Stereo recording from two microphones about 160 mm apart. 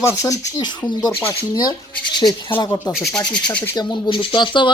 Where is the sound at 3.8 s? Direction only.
30° left (ahead or behind).